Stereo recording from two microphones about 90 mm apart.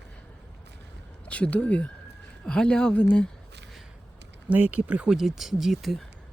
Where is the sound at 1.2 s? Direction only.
15° left (ahead or behind).